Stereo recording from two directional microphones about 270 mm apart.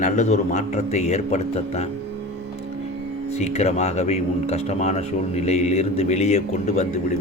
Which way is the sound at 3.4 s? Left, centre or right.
Left.